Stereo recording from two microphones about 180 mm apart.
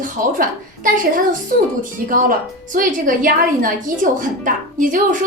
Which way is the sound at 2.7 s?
50° right (ahead or behind).